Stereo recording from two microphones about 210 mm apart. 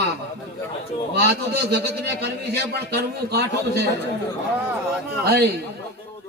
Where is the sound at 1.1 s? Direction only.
50° right (ahead or behind).